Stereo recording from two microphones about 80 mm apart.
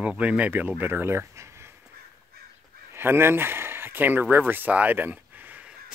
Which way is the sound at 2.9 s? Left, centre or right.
Right.